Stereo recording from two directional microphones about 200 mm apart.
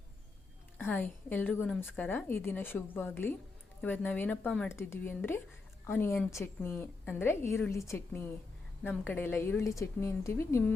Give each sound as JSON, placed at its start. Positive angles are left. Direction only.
{"t": 0.8, "sound": "a woman's voice", "side_deg": 10}